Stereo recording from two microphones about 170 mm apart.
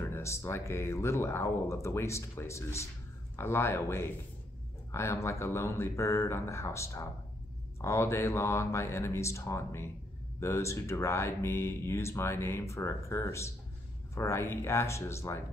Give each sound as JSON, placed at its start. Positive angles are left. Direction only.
{"t": 0.0, "sound": "speech", "side_deg": 15}